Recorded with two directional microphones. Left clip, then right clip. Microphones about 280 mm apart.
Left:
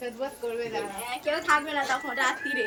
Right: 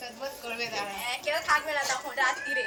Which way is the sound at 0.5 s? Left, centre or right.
Left.